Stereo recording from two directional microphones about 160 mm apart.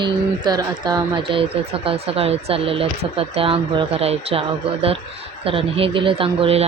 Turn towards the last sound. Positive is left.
turn(degrees=-35)  # may be behind; listen again after turning